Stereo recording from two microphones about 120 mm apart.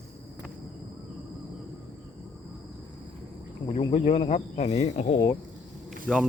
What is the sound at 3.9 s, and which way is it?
Speech, 60° left (ahead or behind).